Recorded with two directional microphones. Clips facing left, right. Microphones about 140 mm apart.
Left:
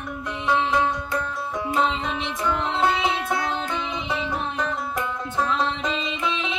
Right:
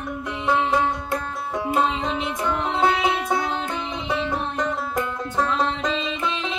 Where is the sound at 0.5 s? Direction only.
50° right (ahead or behind).